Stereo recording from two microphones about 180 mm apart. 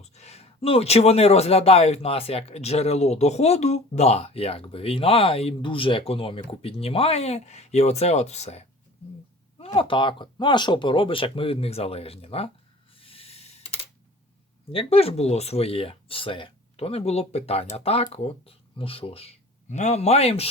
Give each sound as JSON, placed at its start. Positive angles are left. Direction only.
{"t": 0.0, "sound": "a man's voice", "side_deg": 35}
{"t": 13.0, "sound": "snake", "side_deg": 30}
{"t": 14.7, "sound": "a man's voice", "side_deg": 30}